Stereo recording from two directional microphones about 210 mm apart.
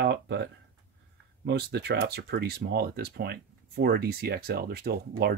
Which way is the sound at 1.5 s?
50° right (ahead or behind).